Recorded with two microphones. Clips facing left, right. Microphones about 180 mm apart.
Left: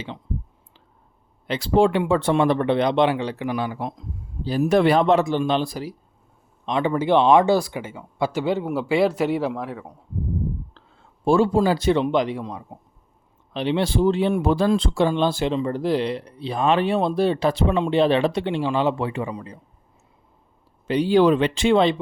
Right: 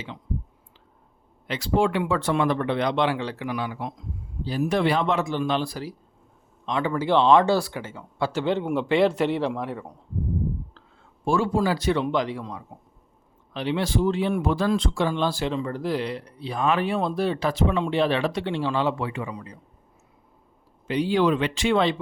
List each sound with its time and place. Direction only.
1.5 s speech: 30° left (ahead or behind); by 5.0 s 45° left (ahead or behind)
5.0 s speech: 35° left (ahead or behind); by 9.9 s centre (ahead or behind)
11.3 s speech: 30° left (ahead or behind)
20.8 s speech: 35° left (ahead or behind)